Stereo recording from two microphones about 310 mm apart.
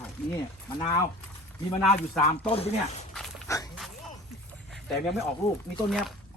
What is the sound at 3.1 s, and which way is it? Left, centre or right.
Dog, centre.